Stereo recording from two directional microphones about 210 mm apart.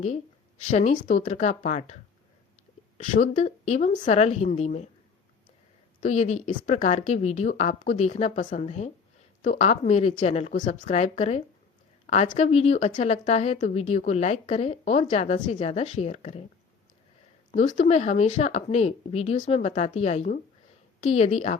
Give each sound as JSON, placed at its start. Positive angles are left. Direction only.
{"t": 0.7, "sound": "a woman's voice", "side_deg": 35}
{"t": 3.0, "sound": "a woman's voice", "side_deg": 35}
{"t": 6.0, "sound": "a woman's voice", "side_deg": 35}
{"t": 17.7, "sound": "a woman's voice", "side_deg": 35}